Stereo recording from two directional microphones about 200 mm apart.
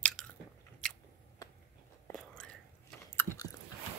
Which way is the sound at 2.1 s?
5° left (ahead or behind).